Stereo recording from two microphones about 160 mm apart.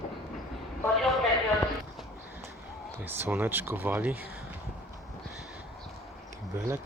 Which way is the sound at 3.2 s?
15° right (ahead or behind).